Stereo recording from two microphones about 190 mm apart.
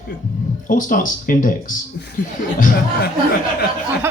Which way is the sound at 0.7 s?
45° left (ahead or behind).